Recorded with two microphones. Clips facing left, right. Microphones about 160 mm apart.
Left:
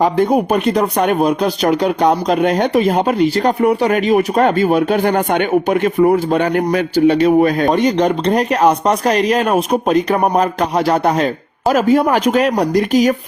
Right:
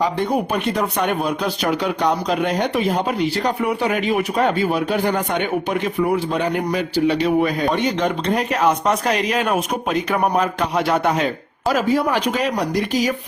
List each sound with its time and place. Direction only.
0.0 s speech: 45° left (ahead or behind)